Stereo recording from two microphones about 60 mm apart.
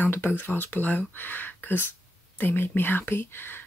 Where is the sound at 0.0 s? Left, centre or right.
Left.